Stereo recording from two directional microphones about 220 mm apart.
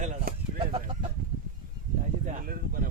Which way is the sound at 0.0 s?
35° right (ahead or behind).